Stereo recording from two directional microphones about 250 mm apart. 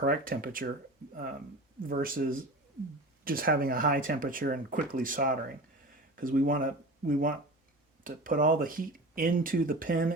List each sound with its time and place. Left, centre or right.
0.0 s speech: right